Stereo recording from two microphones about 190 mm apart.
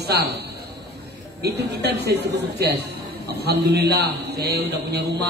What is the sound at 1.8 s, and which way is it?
A man's voice, 60° right (ahead or behind).